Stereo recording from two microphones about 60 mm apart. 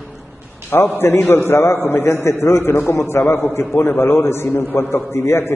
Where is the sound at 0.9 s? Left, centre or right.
Left.